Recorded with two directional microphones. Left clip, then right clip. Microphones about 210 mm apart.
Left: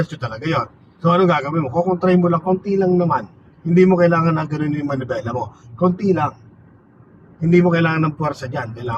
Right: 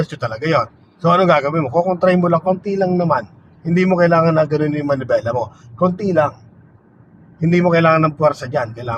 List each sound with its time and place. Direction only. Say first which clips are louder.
0.0 s a man's voice: right 4 dB; 45° right (ahead or behind)
7.3 s a man's voice: right 1 dB; 45° right (ahead or behind)